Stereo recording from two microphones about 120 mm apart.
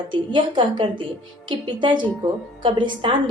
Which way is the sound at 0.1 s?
40° right (ahead or behind).